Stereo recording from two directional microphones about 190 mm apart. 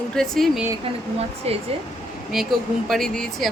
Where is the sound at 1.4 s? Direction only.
35° right (ahead or behind).